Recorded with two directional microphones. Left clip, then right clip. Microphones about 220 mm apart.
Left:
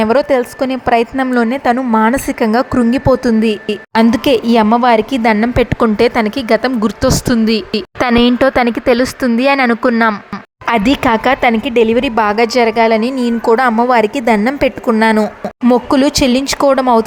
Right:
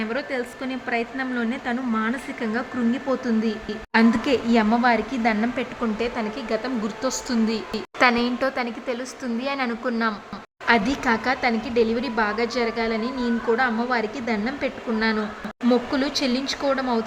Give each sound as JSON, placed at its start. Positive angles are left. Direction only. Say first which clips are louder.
{"t": 0.0, "sound": "a woman's voice", "louder": "left 16 dB", "side_deg": 45}